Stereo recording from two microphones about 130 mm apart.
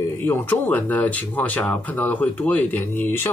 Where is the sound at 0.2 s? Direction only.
15° left (ahead or behind).